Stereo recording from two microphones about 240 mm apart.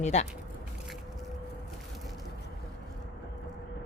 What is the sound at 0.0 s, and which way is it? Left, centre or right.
Speech, left.